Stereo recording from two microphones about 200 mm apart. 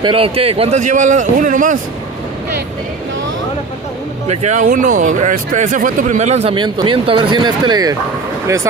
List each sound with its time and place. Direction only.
0.0 s speech: 25° right (ahead or behind)
4.3 s speech: 35° right (ahead or behind); by 8.0 s 20° right (ahead or behind)